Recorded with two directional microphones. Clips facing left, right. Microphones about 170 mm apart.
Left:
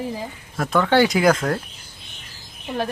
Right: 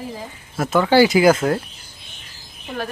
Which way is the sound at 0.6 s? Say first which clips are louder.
Right 3 dB; 5° right (ahead or behind).